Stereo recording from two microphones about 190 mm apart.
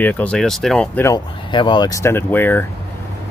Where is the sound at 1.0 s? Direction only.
20° left (ahead or behind).